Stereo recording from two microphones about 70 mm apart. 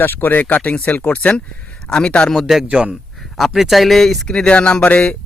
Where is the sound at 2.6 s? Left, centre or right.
Centre.